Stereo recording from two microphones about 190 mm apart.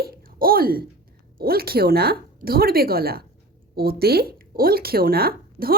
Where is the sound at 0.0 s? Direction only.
50° right (ahead or behind).